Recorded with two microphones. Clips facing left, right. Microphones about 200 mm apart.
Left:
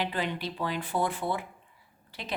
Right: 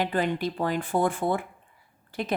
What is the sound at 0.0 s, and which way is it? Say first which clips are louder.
A woman's voice: right 6 dB; 50° right (ahead or behind).